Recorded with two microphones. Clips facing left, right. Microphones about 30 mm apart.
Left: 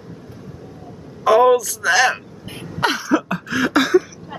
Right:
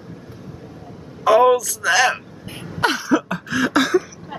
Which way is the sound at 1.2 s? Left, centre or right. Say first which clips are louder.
Left 1 dB; centre.